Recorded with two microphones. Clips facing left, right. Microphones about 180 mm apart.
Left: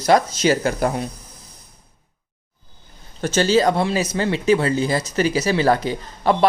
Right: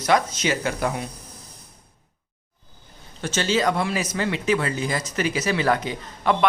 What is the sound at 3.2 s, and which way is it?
Speech, 40° left (ahead or behind).